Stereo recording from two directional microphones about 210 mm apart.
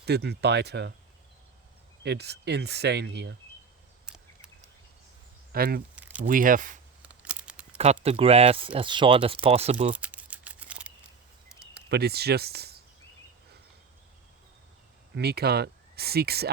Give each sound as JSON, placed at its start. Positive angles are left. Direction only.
{"t": 0.0, "sound": "speech", "side_deg": -50}
{"t": 2.0, "sound": "speech", "side_deg": -50}
{"t": 5.5, "sound": "speech", "side_deg": -45}
{"t": 6.0, "sound": "a sound", "side_deg": -5}
{"t": 6.2, "sound": "speech", "side_deg": -40}
{"t": 7.0, "sound": "a sound", "side_deg": -5}
{"t": 8.0, "sound": "speech", "side_deg": -30}
{"t": 9.9, "sound": "typing", "side_deg": -5}
{"t": 11.9, "sound": "speech", "side_deg": -50}
{"t": 15.1, "sound": "speech", "side_deg": -50}